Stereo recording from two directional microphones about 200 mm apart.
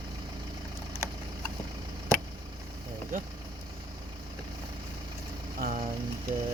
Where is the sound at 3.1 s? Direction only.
45° right (ahead or behind).